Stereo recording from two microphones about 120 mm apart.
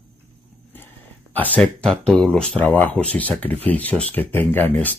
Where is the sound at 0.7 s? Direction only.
15° left (ahead or behind).